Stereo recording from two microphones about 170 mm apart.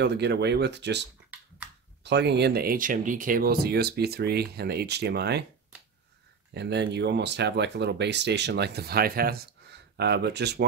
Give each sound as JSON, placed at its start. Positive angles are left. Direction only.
{"t": 0.0, "sound": "speech", "side_deg": -90}
{"t": 2.0, "sound": "speech", "side_deg": -85}
{"t": 6.5, "sound": "speech", "side_deg": -80}